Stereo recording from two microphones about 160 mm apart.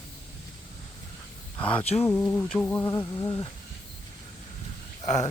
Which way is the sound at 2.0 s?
10° left (ahead or behind).